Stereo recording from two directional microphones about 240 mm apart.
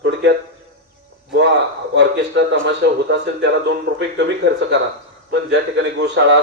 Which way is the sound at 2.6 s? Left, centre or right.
Right.